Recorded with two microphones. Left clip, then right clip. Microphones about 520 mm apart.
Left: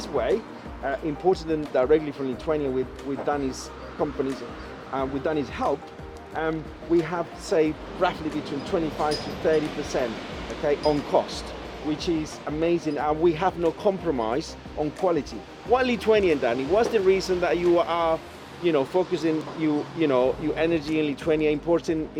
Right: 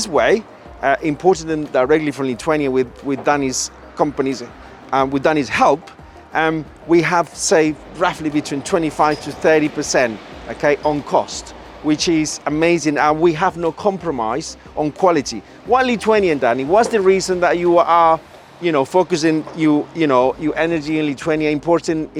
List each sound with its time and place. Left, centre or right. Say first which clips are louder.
0.0 s a man's voice: right 10 dB; right
10.8 s speech: right 5 dB; right
11.9 s a man's voice: right 11 dB; right
15.0 s a man's voice: right 10 dB; right